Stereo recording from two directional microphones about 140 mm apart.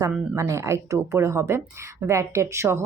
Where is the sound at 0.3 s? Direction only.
20° right (ahead or behind).